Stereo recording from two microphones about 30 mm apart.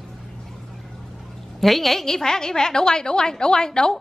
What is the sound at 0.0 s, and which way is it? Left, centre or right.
Music, centre.